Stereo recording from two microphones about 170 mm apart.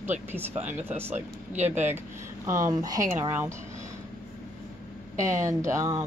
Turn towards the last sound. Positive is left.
turn(degrees=-20)  # may be behind; listen again after turning